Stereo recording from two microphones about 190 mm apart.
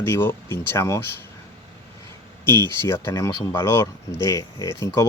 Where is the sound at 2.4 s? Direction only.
10° left (ahead or behind).